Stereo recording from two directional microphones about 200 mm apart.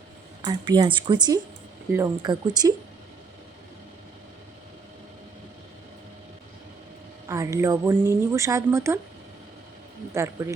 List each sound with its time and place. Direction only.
0.4 s speech: 20° right (ahead or behind)
7.3 s speech: 15° right (ahead or behind)
10.2 s speech: 15° right (ahead or behind)